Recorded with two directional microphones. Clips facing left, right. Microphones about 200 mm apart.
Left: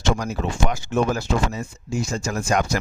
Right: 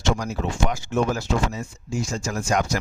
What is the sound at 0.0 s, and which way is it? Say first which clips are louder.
Speech: left 1 dB; 60° left (ahead or behind).